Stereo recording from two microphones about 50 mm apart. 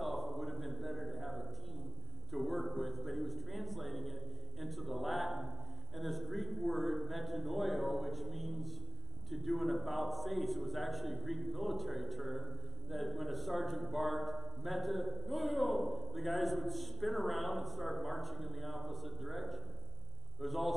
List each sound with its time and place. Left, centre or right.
0.0 s a sound: centre
9.3 s a man's voice: centre
20.4 s a man's voice: centre